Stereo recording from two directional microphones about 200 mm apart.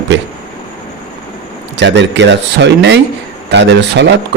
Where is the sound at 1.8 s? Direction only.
60° right (ahead or behind).